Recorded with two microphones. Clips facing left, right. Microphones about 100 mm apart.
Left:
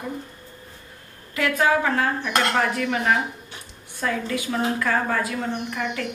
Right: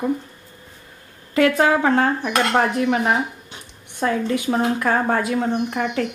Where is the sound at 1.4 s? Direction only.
35° right (ahead or behind).